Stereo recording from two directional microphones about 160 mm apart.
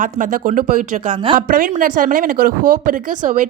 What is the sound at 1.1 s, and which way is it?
Speech, 30° right (ahead or behind).